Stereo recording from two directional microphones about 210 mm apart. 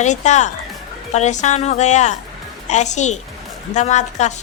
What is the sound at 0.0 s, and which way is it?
A woman's voice, 35° left (ahead or behind).